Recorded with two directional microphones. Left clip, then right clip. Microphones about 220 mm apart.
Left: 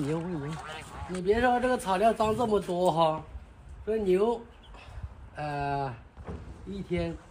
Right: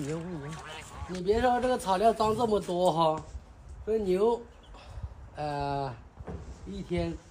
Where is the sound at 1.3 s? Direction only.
15° right (ahead or behind).